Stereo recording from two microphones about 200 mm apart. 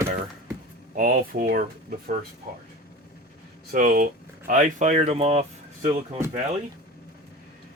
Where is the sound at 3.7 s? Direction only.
45° right (ahead or behind).